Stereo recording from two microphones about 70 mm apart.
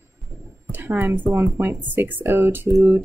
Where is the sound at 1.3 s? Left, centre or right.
Right.